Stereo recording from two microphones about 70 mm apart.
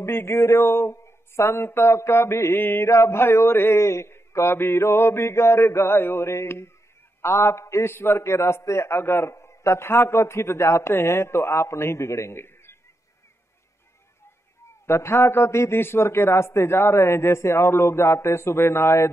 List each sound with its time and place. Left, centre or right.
0.0 s a man's voice: left
2.9 s a man's voice: left
14.9 s a man's voice: left